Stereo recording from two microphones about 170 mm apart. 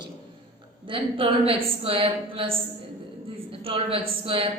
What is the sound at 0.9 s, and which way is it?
A woman's voice, 30° right (ahead or behind).